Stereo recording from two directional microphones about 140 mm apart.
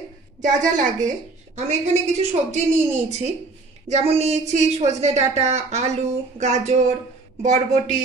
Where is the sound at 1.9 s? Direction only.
50° right (ahead or behind).